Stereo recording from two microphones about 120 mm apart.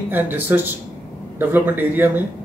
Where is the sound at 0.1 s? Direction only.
15° right (ahead or behind).